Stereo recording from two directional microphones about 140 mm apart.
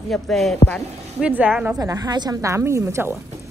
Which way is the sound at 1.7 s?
25° right (ahead or behind).